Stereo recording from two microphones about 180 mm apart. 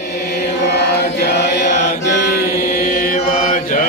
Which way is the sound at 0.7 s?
65° left (ahead or behind).